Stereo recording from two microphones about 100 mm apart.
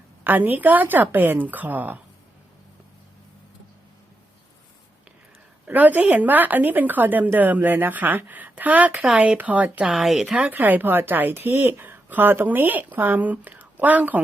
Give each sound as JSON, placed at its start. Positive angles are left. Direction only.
{"t": 0.3, "sound": "a woman's voice", "side_deg": -20}
{"t": 5.6, "sound": "a woman's voice", "side_deg": -15}
{"t": 9.9, "sound": "speech", "side_deg": -5}
{"t": 10.5, "sound": "speech", "side_deg": -20}